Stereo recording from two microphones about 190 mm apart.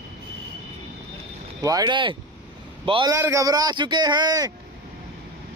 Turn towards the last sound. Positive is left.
turn(degrees=-20)  # may be behind; listen again after turning